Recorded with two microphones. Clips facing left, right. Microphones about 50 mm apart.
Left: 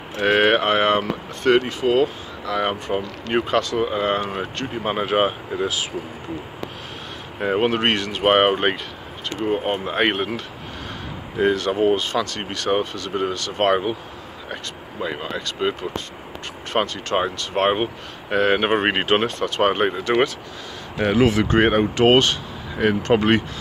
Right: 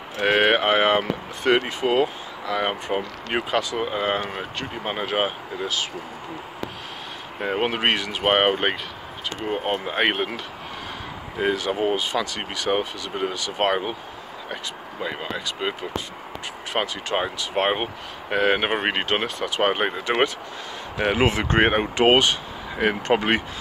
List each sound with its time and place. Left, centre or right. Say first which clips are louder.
0.2 s speech: left 2 dB; centre
7.3 s speech: left 4 dB; centre
16.7 s speech: left 3 dB; centre
19.2 s speech: left 3 dB; centre
21.0 s speech: left 3 dB; right